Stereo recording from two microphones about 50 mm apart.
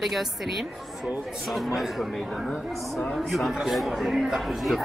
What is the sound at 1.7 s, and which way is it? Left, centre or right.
A woman's voice, centre.